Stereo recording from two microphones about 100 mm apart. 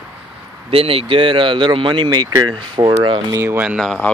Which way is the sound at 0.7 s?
70° right (ahead or behind).